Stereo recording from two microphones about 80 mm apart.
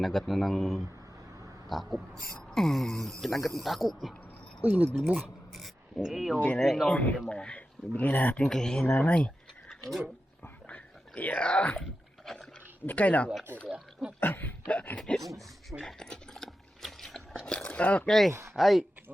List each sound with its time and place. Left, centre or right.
0.0 s speech: centre
4.6 s speech: centre
5.5 s speech: centre
6.8 s speech: centre
8.4 s speech: centre
10.7 s dog: centre
12.2 s rowboat: centre
12.8 s speech: left
15.1 s speech: centre
15.8 s a sound: centre
17.4 s speech: centre
18.1 s speech: centre